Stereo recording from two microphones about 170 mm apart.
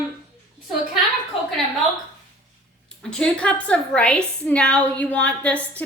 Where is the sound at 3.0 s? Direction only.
5° left (ahead or behind).